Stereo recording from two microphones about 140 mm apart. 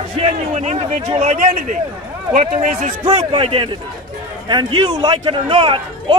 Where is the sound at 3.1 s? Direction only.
40° right (ahead or behind).